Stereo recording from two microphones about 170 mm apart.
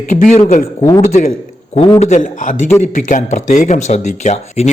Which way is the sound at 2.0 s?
40° left (ahead or behind).